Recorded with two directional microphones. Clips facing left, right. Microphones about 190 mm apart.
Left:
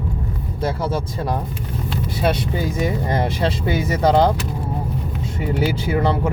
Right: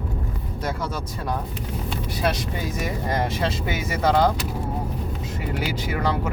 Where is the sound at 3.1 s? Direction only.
30° left (ahead or behind).